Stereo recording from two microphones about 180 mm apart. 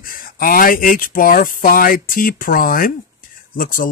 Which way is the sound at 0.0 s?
50° left (ahead or behind).